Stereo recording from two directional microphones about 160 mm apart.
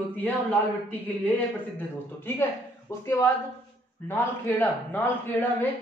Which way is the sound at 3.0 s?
15° left (ahead or behind).